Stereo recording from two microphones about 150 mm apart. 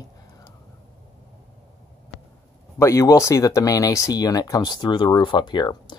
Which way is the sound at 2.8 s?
20° left (ahead or behind).